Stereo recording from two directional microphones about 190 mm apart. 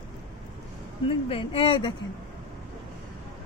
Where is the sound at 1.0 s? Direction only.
30° left (ahead or behind).